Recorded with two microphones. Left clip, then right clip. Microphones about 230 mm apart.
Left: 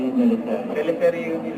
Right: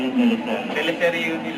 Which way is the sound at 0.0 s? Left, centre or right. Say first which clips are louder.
Even; centre.